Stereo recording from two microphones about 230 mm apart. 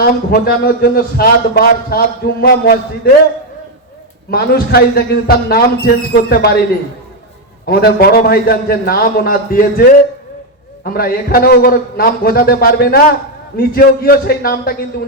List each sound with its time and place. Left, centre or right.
0.0 s a man's voice: left
4.3 s speech: left
7.6 s a man's voice: left
10.8 s a man's voice: left